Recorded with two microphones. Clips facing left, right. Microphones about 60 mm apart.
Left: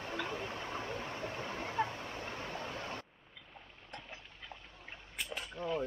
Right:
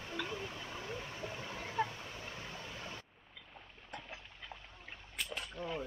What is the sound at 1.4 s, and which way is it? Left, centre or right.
Speech, centre.